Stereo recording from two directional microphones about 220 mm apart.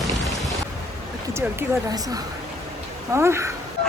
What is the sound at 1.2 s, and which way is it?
Speech, 10° right (ahead or behind).